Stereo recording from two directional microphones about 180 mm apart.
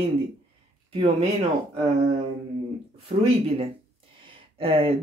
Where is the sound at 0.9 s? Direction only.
35° right (ahead or behind).